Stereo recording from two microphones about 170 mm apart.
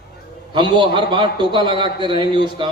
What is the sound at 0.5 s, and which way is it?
A man's voice, 30° right (ahead or behind).